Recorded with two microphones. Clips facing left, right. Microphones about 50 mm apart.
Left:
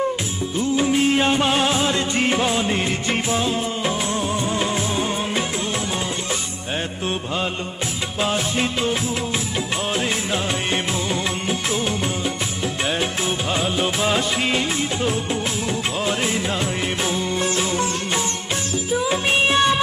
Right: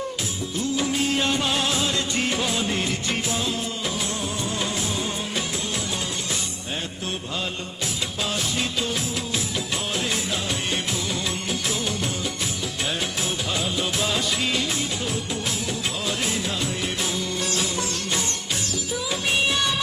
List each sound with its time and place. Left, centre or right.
0.8 s music: left
8.2 s music of bollywood: left
10.7 s music of bollywood: left
13.5 s music of bollywood: left
17.0 s music: left